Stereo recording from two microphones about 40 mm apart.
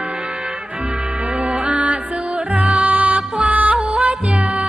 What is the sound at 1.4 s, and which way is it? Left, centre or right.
Music, right.